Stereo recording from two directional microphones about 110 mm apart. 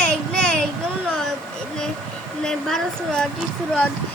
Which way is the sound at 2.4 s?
5° left (ahead or behind).